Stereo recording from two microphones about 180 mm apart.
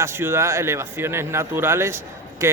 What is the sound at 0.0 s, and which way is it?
Speech, 15° right (ahead or behind).